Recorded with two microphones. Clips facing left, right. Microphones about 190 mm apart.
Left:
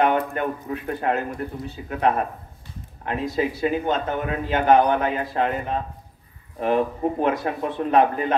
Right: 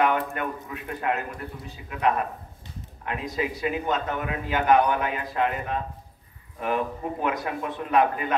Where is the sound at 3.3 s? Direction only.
30° left (ahead or behind).